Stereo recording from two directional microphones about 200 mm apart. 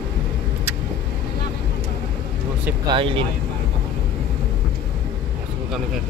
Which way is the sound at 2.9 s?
25° right (ahead or behind).